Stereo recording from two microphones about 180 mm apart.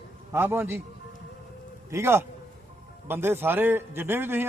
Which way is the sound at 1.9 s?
15° right (ahead or behind).